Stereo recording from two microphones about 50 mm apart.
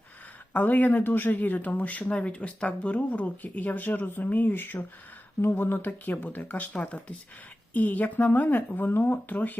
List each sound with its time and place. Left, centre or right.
0.5 s speech: left
9.3 s speech: left